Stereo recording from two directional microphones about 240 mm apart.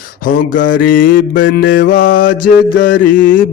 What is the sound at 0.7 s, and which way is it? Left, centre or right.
A man's voice, left.